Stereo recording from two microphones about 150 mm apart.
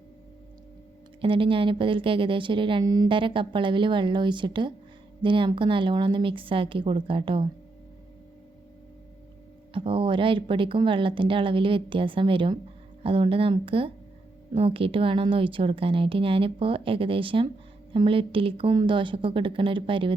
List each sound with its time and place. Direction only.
1.2 s a woman's voice: 35° right (ahead or behind)
9.7 s a woman's voice: 35° right (ahead or behind)